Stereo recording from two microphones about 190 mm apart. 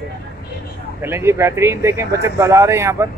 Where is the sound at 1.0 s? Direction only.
10° right (ahead or behind).